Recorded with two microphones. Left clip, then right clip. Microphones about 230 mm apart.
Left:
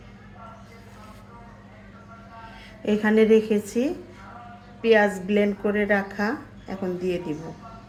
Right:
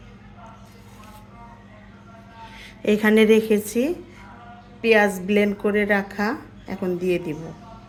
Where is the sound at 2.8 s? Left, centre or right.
Right.